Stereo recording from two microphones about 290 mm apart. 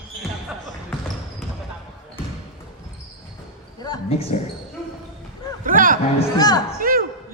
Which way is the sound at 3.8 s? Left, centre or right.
Centre.